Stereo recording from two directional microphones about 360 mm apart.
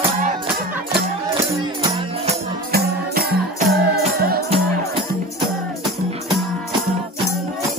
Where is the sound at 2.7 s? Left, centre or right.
Right.